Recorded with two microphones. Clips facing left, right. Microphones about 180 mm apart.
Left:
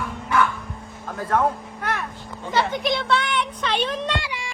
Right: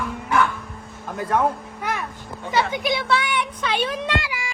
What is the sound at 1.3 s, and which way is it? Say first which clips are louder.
Speech: even; 15° right (ahead or behind).